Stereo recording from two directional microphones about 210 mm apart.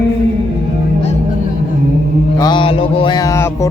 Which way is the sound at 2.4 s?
20° left (ahead or behind).